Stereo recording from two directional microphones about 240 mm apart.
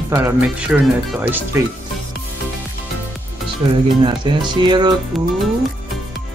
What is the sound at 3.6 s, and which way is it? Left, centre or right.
Music, centre.